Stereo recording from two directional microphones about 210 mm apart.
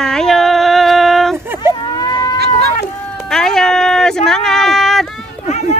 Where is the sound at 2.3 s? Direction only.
50° right (ahead or behind).